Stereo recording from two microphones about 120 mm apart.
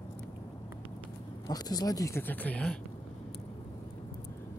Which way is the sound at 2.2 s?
15° left (ahead or behind).